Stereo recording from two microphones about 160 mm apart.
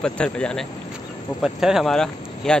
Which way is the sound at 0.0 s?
5° left (ahead or behind).